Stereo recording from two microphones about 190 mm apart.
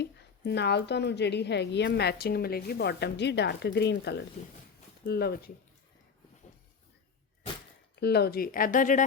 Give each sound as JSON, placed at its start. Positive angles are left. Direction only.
{"t": 0.0, "sound": "a woman's voice", "side_deg": 65}
{"t": 7.9, "sound": "speech", "side_deg": 60}